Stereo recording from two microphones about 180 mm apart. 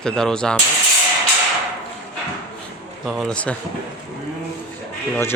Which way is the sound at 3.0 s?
Centre (ahead or behind).